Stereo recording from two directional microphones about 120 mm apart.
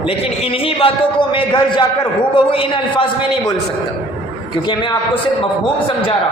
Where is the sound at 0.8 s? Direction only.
45° left (ahead or behind).